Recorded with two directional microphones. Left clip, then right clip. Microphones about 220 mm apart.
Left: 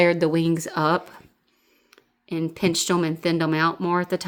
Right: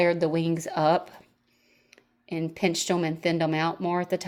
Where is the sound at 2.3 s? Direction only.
25° left (ahead or behind).